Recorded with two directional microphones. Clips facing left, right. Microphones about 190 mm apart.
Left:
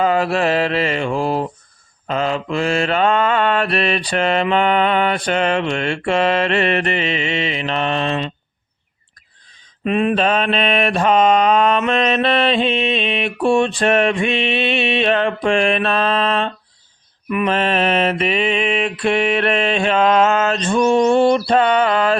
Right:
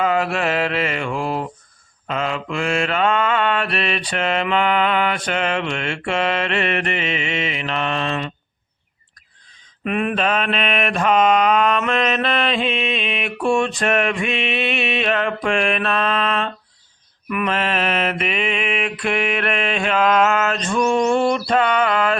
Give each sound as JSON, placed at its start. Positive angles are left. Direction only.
{"t": 0.0, "sound": "mantra", "side_deg": 35}
{"t": 9.8, "sound": "mantra", "side_deg": 25}